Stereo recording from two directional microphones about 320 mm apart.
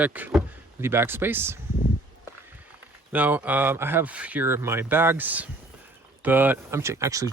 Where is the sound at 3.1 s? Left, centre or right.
Centre.